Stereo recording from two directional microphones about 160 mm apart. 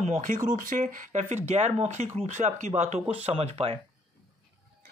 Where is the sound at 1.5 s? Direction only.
40° right (ahead or behind).